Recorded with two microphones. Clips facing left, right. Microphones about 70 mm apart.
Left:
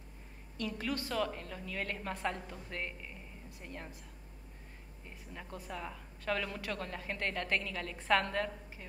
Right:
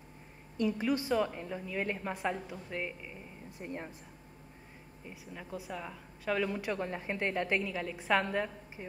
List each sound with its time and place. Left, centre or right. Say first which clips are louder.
0.6 s a woman's voice: right 7 dB; centre
3.5 s a woman's voice: right 6 dB; right
5.0 s a woman's voice: right 3 dB; centre